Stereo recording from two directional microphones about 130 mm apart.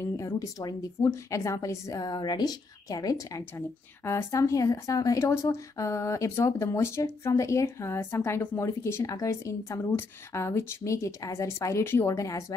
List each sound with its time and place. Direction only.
0.0 s a woman's voice: 25° left (ahead or behind)